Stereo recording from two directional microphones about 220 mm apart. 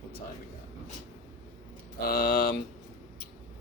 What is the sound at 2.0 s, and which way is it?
Speech, 40° left (ahead or behind).